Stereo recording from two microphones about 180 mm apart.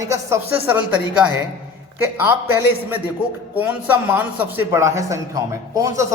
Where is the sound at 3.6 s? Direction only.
10° right (ahead or behind).